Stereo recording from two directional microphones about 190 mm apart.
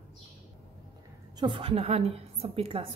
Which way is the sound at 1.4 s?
30° right (ahead or behind).